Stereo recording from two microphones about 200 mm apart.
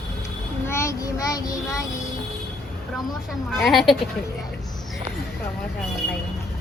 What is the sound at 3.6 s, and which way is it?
Speech, centre (ahead or behind).